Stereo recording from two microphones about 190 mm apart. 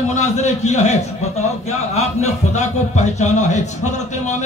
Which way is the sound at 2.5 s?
35° left (ahead or behind).